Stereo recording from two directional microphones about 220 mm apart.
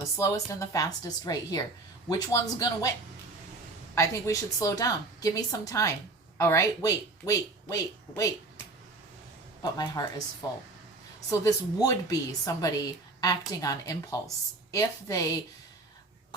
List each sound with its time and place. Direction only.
0.2 s a woman's voice: 15° left (ahead or behind)
3.9 s a woman's voice: 15° left (ahead or behind)
9.7 s a woman's voice: 15° left (ahead or behind)
11.3 s a woman's voice: 15° left (ahead or behind)